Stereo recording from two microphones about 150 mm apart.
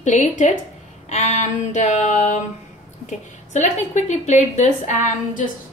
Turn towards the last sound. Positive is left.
turn(degrees=55)  # may be behind; listen again after turning